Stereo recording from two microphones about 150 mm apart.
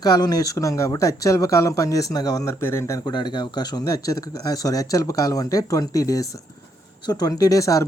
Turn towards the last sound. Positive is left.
turn(degrees=20)  # may be behind; listen again after turning